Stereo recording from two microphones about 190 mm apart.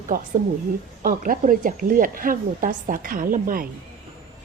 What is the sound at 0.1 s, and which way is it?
A woman's voice, 50° right (ahead or behind).